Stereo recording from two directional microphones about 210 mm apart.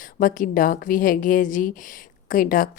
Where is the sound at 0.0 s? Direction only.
40° left (ahead or behind).